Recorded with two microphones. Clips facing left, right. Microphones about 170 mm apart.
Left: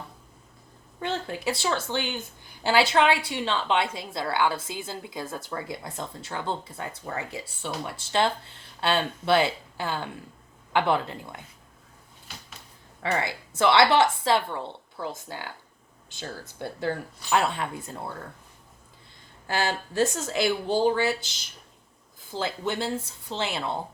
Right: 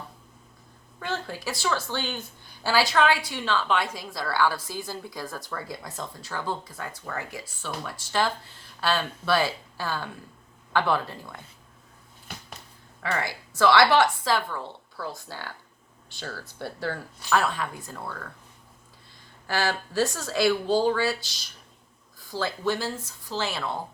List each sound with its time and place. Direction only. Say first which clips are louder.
0.9 s a woman's voice: left 2 dB; 20° left (ahead or behind)
13.0 s a woman's voice: left 2 dB; 25° left (ahead or behind)
19.5 s a woman's voice: even; 20° left (ahead or behind)